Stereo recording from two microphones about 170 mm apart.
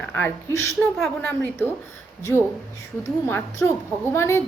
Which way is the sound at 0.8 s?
Centre (ahead or behind).